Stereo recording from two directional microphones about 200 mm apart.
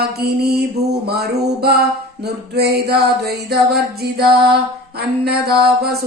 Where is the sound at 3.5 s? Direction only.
55° right (ahead or behind).